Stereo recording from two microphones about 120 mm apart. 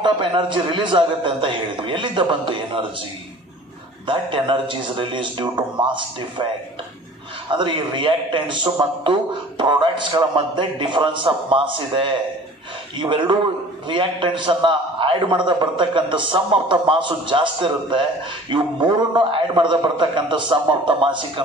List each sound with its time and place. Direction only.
0.0 s a man's voice: 40° right (ahead or behind)
4.1 s a man's voice: 45° right (ahead or behind)
7.5 s a man's voice: 40° right (ahead or behind)